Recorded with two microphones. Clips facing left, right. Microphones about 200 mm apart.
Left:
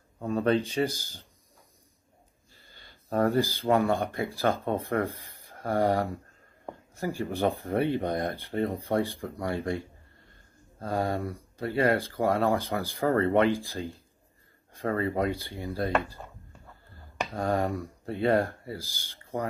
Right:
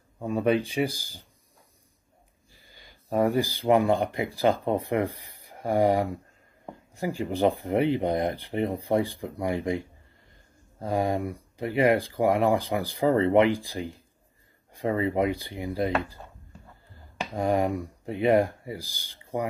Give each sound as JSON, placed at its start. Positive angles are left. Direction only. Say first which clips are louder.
{"t": 0.2, "sound": "speech", "louder": "right 1 dB", "side_deg": -15}
{"t": 2.5, "sound": "speech", "louder": "right 1 dB", "side_deg": -15}
{"t": 17.3, "sound": "speech", "louder": "right 3 dB", "side_deg": -15}